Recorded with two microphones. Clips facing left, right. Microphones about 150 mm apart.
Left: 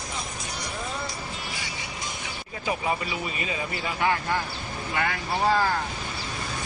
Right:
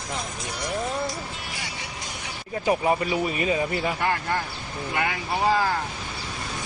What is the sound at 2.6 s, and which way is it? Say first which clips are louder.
Speech: right 6 dB; 40° right (ahead or behind).